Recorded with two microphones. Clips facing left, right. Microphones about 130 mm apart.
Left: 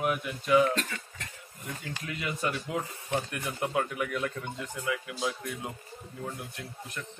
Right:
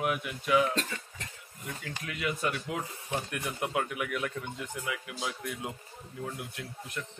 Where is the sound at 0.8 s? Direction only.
25° right (ahead or behind).